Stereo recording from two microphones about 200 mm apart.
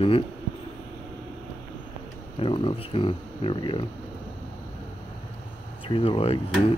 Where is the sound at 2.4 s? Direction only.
25° left (ahead or behind).